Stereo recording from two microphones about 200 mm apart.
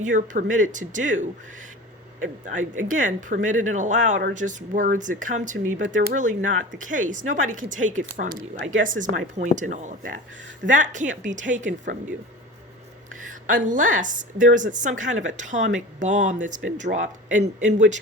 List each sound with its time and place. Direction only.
0.0 s speech: 40° right (ahead or behind)
2.6 s speech: 40° right (ahead or behind)
8.4 s speech: 75° right (ahead or behind)
8.8 s speech: 40° right (ahead or behind)
13.5 s speech: 40° right (ahead or behind)